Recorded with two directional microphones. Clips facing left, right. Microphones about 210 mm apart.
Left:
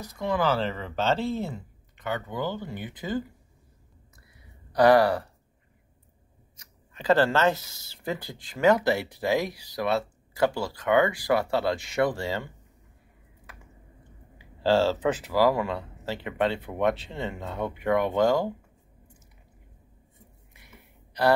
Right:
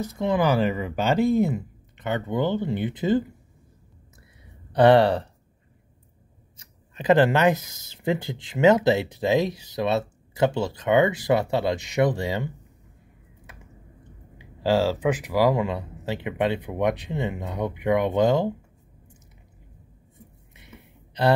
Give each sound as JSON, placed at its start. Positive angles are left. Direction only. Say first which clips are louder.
{"t": 0.0, "sound": "speech", "louder": "right 4 dB", "side_deg": -25}
{"t": 4.7, "sound": "speech", "louder": "right 3 dB", "side_deg": -25}
{"t": 6.5, "sound": "speech", "louder": "right 3 dB", "side_deg": -20}
{"t": 13.5, "sound": "a sound", "louder": "right 1 dB", "side_deg": -20}
{"t": 14.4, "sound": "speech", "louder": "right 1 dB", "side_deg": -10}
{"t": 20.5, "sound": "a sound", "louder": "right 6 dB", "side_deg": -20}